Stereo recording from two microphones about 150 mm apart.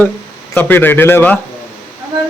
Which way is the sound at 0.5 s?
15° left (ahead or behind).